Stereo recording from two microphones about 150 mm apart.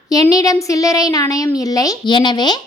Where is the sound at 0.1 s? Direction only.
25° left (ahead or behind).